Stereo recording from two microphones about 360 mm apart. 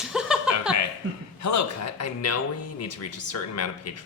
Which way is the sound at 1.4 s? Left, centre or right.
Left.